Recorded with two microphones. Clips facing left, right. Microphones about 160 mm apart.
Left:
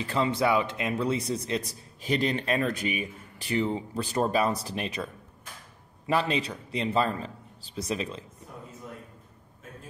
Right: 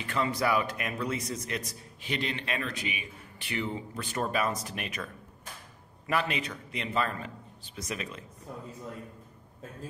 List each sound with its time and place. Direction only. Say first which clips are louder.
0.0 s a man's voice: left 4 dB; 30° left (ahead or behind)